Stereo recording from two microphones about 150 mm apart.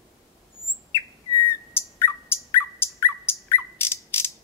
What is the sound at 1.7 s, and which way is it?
Bird, 15° left (ahead or behind).